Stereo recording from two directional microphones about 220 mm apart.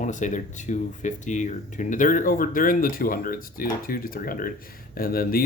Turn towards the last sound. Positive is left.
turn(degrees=40)  # may be behind; listen again after turning